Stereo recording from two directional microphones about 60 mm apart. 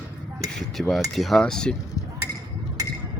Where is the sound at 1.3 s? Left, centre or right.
Centre.